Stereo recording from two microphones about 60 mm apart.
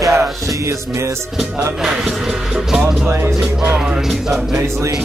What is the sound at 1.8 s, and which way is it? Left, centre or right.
Music, centre.